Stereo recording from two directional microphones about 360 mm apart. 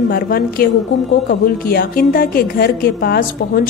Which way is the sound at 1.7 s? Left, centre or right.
Left.